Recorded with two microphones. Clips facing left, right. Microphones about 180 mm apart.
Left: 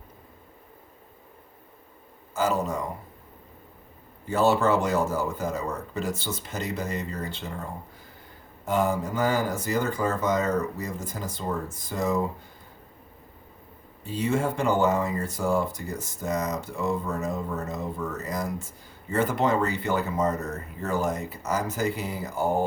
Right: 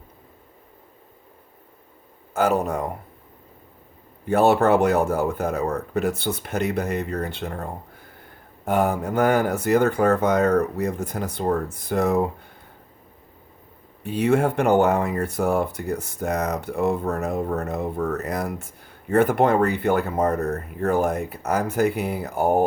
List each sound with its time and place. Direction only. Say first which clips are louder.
2.3 s speech: right 5 dB; 60° right (ahead or behind)
4.3 s speech: right 5 dB; 60° right (ahead or behind)
14.0 s speech: right 6 dB; 65° right (ahead or behind)